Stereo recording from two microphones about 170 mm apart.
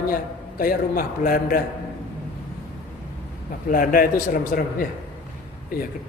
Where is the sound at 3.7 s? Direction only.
55° left (ahead or behind).